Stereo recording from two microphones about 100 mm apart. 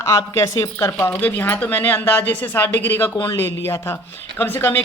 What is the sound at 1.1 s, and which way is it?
A man's voice, 20° left (ahead or behind).